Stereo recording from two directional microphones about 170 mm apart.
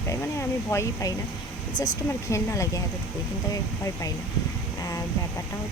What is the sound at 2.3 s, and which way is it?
Speech, 20° left (ahead or behind).